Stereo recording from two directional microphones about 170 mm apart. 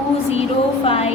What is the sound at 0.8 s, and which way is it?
Speech, 35° left (ahead or behind).